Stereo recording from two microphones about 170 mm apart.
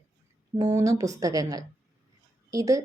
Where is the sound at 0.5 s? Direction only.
15° right (ahead or behind).